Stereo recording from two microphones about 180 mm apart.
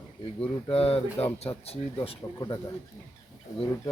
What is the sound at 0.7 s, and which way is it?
Speech, 35° left (ahead or behind).